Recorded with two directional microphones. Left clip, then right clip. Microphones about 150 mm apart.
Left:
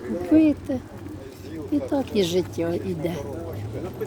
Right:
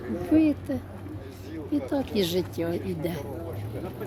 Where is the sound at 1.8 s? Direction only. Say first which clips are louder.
Left 4 dB; centre (ahead or behind).